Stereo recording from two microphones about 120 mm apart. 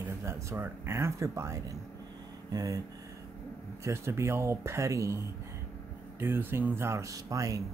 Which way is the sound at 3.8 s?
20° right (ahead or behind).